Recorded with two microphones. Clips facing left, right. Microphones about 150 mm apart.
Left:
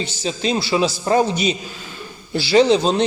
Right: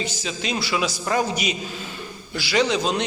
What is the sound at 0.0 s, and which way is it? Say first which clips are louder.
A man's voice: left 5 dB; 30° left (ahead or behind).